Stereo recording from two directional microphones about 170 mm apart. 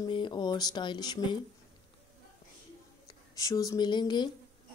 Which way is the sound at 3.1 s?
20° left (ahead or behind).